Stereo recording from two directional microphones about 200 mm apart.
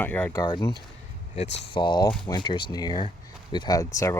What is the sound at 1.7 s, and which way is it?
Speech, 25° left (ahead or behind).